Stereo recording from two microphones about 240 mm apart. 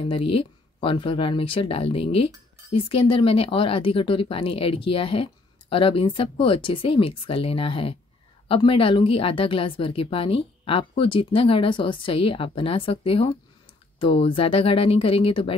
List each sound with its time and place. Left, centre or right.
0.1 s speech: left